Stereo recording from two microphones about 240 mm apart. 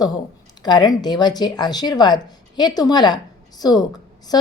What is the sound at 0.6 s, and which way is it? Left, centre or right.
Speech, centre.